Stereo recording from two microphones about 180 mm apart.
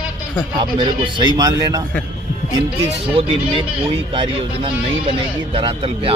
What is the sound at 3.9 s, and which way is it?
Speech, 30° right (ahead or behind).